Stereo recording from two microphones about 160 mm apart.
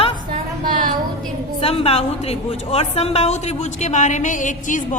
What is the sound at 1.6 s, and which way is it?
A woman's voice, 40° left (ahead or behind).